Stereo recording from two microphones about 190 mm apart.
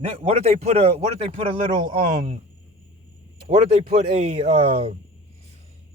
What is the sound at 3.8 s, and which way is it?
A man's voice, 30° right (ahead or behind).